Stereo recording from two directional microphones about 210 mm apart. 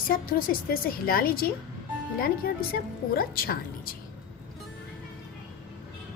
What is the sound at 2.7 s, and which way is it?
A woman's voice, 45° left (ahead or behind).